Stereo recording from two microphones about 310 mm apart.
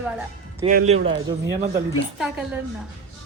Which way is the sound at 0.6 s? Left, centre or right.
Right.